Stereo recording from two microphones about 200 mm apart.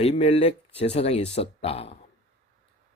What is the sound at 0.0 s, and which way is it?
Speech, 30° left (ahead or behind).